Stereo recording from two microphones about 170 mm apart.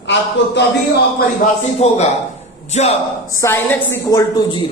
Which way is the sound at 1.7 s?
40° left (ahead or behind).